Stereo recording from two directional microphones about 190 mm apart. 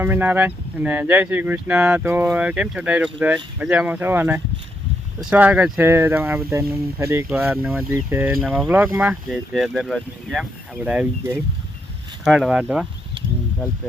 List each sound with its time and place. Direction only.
0.0 s speech: 10° right (ahead or behind)